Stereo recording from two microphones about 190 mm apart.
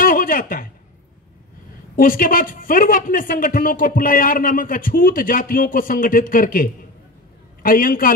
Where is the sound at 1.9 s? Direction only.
45° left (ahead or behind).